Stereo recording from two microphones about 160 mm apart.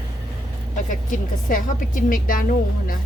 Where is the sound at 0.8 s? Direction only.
55° left (ahead or behind).